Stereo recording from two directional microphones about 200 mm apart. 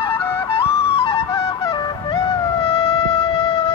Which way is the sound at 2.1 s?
20° left (ahead or behind).